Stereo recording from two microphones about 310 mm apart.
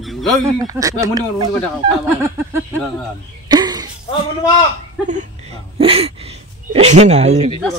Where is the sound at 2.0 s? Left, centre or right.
Centre.